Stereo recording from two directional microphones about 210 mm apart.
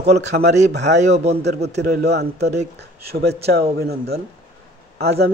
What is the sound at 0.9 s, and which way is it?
Speech, 30° right (ahead or behind).